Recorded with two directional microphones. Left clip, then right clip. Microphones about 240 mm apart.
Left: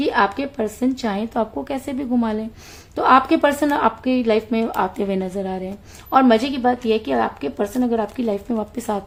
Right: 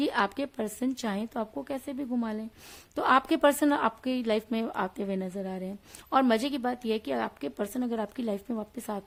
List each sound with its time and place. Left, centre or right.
0.0 s speech: right